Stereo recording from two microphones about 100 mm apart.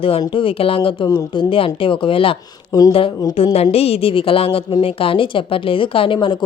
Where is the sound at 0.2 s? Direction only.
60° left (ahead or behind).